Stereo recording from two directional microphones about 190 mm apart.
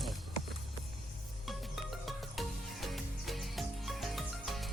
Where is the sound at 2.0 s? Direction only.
Centre (ahead or behind).